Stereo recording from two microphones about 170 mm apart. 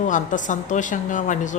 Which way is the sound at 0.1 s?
50° left (ahead or behind).